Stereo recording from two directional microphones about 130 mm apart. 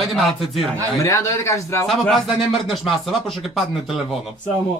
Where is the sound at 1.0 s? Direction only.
25° left (ahead or behind).